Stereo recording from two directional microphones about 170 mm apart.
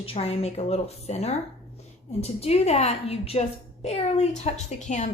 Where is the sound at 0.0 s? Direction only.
35° left (ahead or behind).